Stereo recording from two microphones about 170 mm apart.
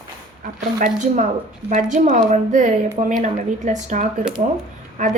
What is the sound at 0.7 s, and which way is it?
A woman's voice, 50° right (ahead or behind).